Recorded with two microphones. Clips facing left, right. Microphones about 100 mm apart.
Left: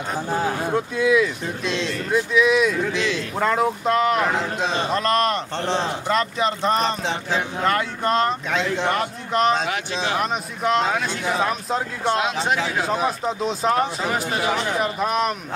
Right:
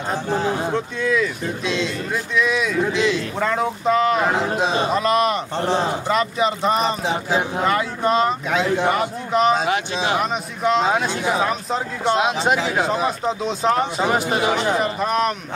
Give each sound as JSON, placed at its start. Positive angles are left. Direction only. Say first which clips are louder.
{"t": 0.7, "sound": "speech", "louder": "left 2 dB", "side_deg": 5}
{"t": 10.9, "sound": "speech", "louder": "right 3 dB", "side_deg": -20}
{"t": 11.3, "sound": "speech", "louder": "right 1 dB", "side_deg": 0}
{"t": 12.2, "sound": "speech", "louder": "right 3 dB", "side_deg": -20}
{"t": 12.7, "sound": "speech", "louder": "right 2 dB", "side_deg": 0}
{"t": 14.1, "sound": "speech", "louder": "right 4 dB", "side_deg": -15}
{"t": 14.8, "sound": "speech", "louder": "right 2 dB", "side_deg": 5}